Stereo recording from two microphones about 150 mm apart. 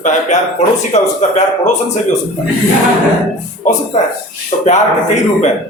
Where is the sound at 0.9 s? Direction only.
50° left (ahead or behind).